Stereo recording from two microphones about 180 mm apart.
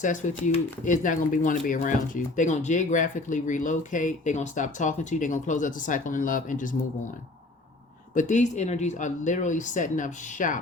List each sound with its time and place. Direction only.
0.0 s speech: 45° left (ahead or behind)
8.1 s speech: 45° left (ahead or behind)